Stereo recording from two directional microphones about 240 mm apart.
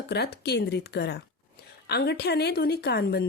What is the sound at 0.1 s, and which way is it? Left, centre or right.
Speech, left.